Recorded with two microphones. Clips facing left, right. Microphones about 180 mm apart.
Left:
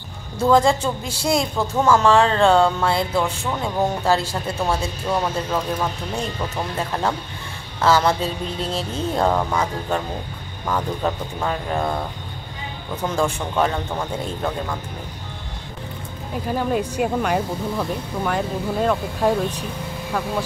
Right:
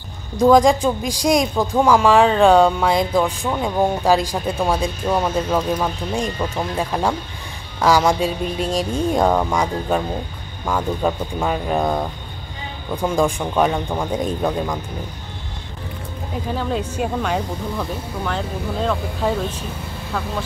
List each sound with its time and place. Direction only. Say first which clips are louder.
0.4 s speech: right 4 dB; 15° right (ahead or behind)
16.5 s speech: left 3 dB; 10° left (ahead or behind)